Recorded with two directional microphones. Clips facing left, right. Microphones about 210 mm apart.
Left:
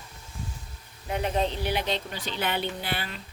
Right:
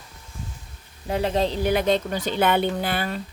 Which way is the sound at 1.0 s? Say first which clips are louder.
Right 4 dB; 30° right (ahead or behind).